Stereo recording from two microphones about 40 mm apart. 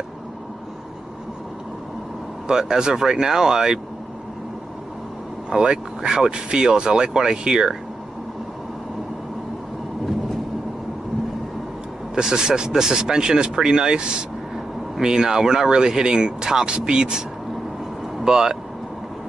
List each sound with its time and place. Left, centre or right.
2.4 s speech: centre
5.5 s speech: centre
12.2 s speech: centre
18.2 s speech: centre